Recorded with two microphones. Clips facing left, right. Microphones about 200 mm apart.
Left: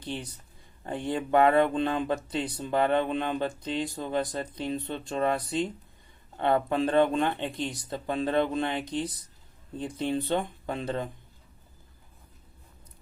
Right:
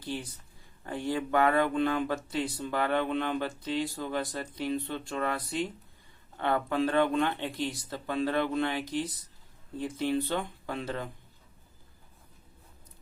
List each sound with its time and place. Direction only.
0.0 s speech: 20° left (ahead or behind)